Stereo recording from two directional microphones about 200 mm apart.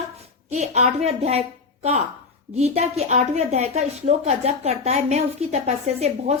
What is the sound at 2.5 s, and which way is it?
A woman's voice, 30° right (ahead or behind).